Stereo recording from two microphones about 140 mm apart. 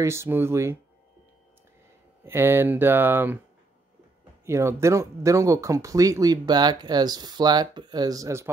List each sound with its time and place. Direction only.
0.0 s speech: 20° right (ahead or behind)
2.2 s speech: 15° right (ahead or behind)
4.5 s speech: 20° right (ahead or behind)